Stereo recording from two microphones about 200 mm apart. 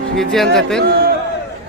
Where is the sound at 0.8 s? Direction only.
50° right (ahead or behind).